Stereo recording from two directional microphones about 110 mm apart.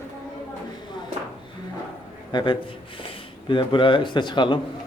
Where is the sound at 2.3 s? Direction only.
45° left (ahead or behind).